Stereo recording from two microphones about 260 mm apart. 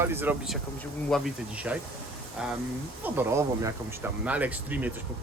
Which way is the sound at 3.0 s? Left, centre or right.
Centre.